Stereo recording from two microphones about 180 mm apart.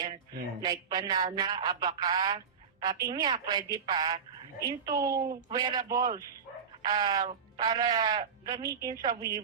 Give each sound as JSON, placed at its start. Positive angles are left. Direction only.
{"t": 0.6, "sound": "speech", "side_deg": -20}